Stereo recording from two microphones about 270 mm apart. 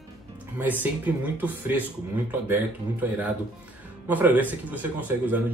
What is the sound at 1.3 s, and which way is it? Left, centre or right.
Speech, centre.